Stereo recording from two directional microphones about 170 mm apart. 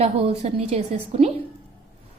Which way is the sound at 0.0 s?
40° right (ahead or behind).